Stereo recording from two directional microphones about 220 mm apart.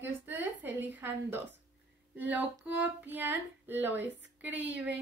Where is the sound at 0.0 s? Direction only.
10° right (ahead or behind).